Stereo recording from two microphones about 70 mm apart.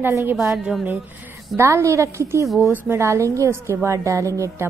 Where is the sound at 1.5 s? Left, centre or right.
Right.